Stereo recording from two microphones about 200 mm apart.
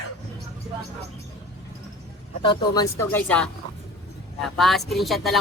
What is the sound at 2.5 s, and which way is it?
Speech, 20° left (ahead or behind).